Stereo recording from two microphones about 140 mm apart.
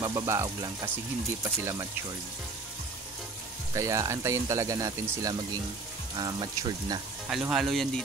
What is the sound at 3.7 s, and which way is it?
Speech, 20° right (ahead or behind).